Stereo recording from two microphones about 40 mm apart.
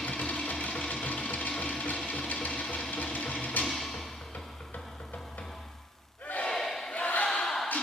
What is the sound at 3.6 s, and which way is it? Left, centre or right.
Music, left.